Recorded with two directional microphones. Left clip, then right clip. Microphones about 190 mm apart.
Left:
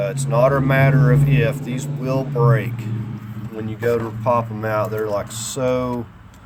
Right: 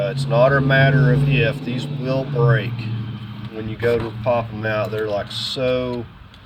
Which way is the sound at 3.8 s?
20° left (ahead or behind).